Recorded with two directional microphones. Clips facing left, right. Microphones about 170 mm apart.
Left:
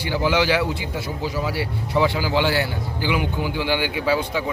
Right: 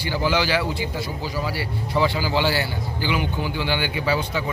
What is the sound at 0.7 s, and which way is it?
A man's voice, 25° left (ahead or behind).